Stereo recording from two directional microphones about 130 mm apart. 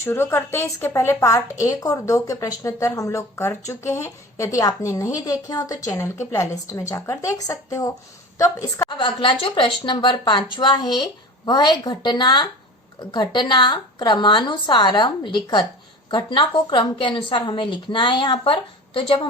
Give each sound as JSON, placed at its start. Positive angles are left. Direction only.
{"t": 0.0, "sound": "speech", "side_deg": 20}
{"t": 8.9, "sound": "speech", "side_deg": 40}